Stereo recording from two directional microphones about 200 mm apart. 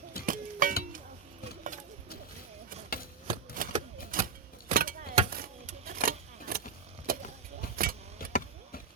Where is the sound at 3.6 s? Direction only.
45° right (ahead or behind).